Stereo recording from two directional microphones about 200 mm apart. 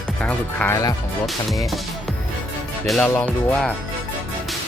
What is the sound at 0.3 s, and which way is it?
Speech, 10° left (ahead or behind).